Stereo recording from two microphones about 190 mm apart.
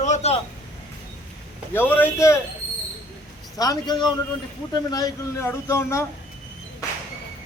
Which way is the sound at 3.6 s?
20° left (ahead or behind).